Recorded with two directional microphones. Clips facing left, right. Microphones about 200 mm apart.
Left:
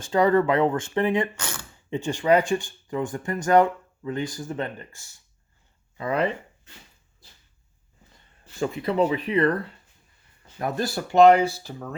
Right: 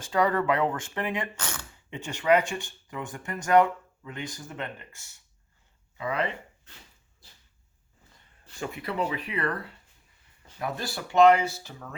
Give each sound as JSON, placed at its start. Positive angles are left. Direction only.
{"t": 0.0, "sound": "speech", "side_deg": 30}
{"t": 8.6, "sound": "speech", "side_deg": 30}
{"t": 10.6, "sound": "speech", "side_deg": 45}